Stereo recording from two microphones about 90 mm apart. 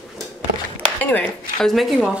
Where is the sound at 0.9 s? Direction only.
20° left (ahead or behind).